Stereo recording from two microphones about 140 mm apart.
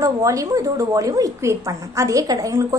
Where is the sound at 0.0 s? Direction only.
25° right (ahead or behind).